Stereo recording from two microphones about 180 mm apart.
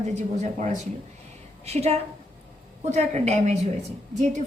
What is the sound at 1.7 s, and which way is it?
A woman's voice, 35° right (ahead or behind).